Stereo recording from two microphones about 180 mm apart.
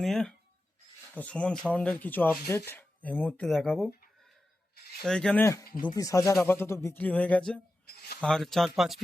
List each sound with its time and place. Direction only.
0.0 s speech: centre (ahead or behind)
5.0 s speech: 5° left (ahead or behind)
5.8 s speech: 20° left (ahead or behind)
7.9 s speech: 60° left (ahead or behind)
8.2 s speech: 5° left (ahead or behind)